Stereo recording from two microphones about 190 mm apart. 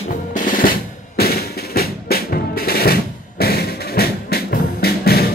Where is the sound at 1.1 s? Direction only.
55° left (ahead or behind).